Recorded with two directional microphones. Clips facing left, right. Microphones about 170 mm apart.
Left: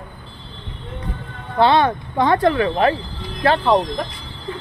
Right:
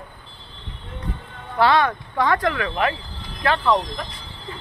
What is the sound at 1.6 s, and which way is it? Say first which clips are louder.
Speech: left 3 dB; 25° left (ahead or behind).